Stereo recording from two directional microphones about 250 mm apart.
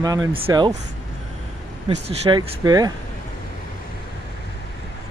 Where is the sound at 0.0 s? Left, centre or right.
Centre.